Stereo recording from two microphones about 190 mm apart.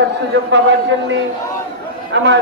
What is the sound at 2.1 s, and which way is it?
Speech, 70° right (ahead or behind).